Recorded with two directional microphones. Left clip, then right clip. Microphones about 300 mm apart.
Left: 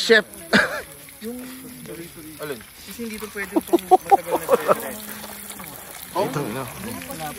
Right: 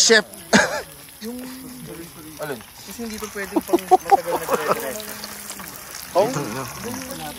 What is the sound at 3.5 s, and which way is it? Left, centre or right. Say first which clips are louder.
Speech: even; centre.